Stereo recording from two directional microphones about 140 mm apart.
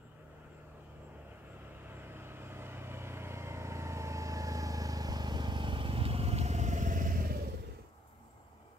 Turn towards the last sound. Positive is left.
turn(degrees=-90)